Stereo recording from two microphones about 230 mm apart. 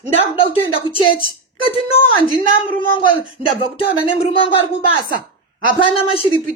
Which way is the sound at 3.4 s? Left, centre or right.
Left.